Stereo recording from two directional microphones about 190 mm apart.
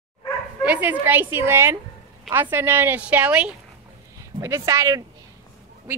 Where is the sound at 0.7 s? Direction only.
10° right (ahead or behind).